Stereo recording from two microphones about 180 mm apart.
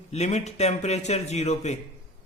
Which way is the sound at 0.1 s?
40° left (ahead or behind).